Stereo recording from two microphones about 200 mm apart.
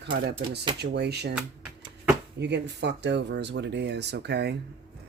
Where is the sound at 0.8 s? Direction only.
55° right (ahead or behind).